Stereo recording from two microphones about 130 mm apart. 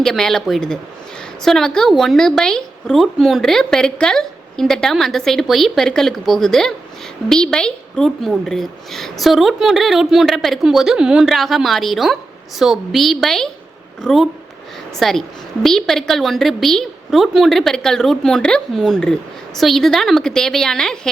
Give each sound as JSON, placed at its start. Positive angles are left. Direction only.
{"t": 0.0, "sound": "a woman's voice", "side_deg": 5}